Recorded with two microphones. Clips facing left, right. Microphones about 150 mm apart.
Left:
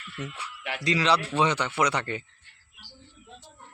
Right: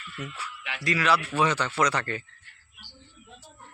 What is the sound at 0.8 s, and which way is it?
Speech, 20° left (ahead or behind).